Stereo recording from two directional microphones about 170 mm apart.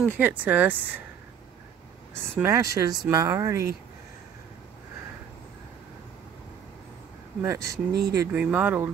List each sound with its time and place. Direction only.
0.2 s speech: 10° right (ahead or behind)
2.3 s speech: 15° right (ahead or behind)
7.4 s speech: 20° right (ahead or behind)
7.9 s speech: 75° right (ahead or behind)
8.2 s speech: 10° right (ahead or behind)